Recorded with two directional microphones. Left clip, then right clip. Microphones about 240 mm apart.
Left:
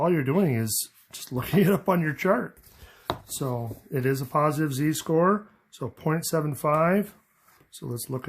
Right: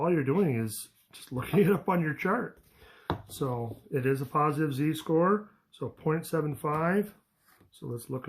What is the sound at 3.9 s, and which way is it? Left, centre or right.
Speech, left.